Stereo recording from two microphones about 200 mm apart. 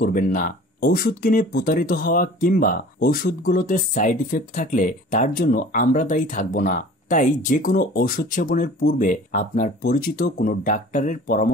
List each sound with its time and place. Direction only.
0.0 s speech: 45° left (ahead or behind)